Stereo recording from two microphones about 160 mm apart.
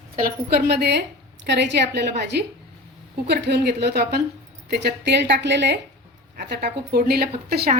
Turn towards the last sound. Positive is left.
turn(degrees=-80)